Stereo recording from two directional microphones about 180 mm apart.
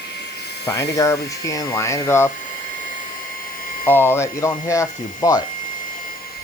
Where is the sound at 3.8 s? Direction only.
10° left (ahead or behind).